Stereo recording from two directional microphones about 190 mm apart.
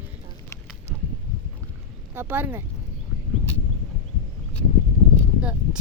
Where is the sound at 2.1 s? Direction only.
10° right (ahead or behind).